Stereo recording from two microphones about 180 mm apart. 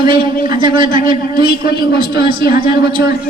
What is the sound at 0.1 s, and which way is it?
A woman's voice, 50° left (ahead or behind).